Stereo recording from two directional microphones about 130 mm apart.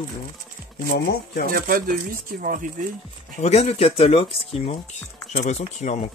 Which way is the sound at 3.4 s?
55° left (ahead or behind).